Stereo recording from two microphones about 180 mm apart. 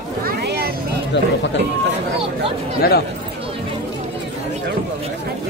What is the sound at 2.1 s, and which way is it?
Speech, 30° right (ahead or behind).